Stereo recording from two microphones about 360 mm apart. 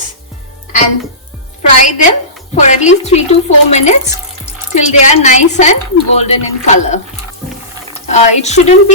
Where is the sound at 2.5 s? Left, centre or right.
Centre.